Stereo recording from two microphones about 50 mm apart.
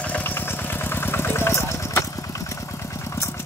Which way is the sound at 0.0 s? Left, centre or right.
Left.